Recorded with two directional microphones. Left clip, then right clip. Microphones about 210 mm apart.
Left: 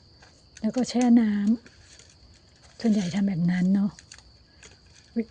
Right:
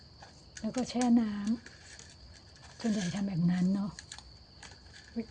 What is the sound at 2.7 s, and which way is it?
Speech, 40° left (ahead or behind).